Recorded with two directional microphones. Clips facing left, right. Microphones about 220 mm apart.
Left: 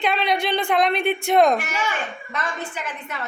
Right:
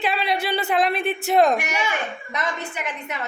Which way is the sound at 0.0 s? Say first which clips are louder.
Left 2 dB; 5° right (ahead or behind).